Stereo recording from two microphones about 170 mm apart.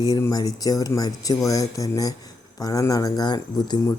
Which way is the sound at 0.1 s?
20° left (ahead or behind).